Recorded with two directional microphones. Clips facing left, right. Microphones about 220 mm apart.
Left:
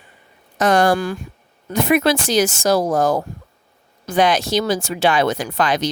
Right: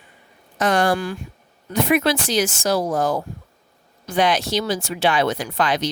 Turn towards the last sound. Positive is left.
turn(degrees=45)  # may be behind; listen again after turning